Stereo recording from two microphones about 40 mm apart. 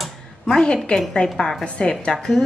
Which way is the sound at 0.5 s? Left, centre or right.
Left.